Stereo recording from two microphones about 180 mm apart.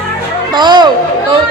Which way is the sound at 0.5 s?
25° right (ahead or behind).